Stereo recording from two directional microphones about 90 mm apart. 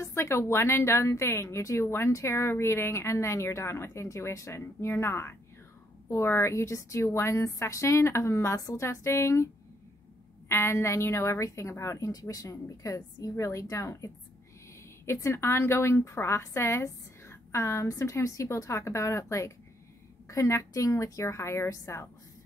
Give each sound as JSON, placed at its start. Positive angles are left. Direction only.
{"t": 0.0, "sound": "a woman's voice", "side_deg": 35}
{"t": 8.5, "sound": "a woman's voice", "side_deg": 40}
{"t": 8.8, "sound": "a woman's voice", "side_deg": 30}
{"t": 10.5, "sound": "a woman's voice", "side_deg": 30}
{"t": 15.1, "sound": "a woman's voice", "side_deg": 30}